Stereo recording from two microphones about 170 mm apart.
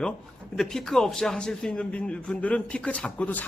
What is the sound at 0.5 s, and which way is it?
A man's voice, centre (ahead or behind).